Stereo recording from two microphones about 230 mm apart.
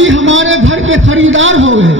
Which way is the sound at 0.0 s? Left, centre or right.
Right.